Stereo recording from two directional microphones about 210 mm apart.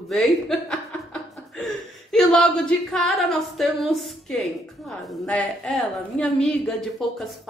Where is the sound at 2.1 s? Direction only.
Centre (ahead or behind).